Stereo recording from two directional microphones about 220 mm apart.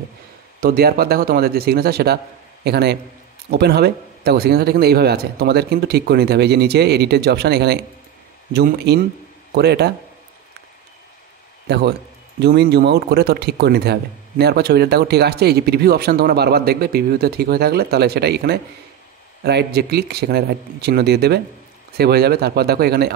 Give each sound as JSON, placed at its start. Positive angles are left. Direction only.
{"t": 0.6, "sound": "speech", "side_deg": -45}
{"t": 11.6, "sound": "a man's voice", "side_deg": -50}